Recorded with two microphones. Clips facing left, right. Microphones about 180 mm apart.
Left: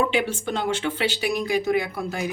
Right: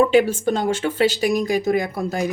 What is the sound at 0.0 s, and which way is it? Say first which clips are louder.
Speech: right 8 dB; 40° right (ahead or behind).